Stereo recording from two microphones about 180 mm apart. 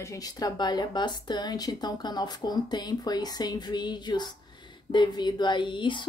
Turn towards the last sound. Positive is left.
turn(degrees=25)  # may be behind; listen again after turning